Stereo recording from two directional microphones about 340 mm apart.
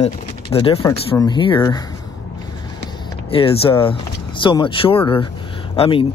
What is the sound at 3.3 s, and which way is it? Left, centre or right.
Speech, centre.